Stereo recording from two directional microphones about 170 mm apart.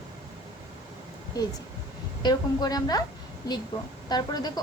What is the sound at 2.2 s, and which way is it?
Speech, 25° left (ahead or behind).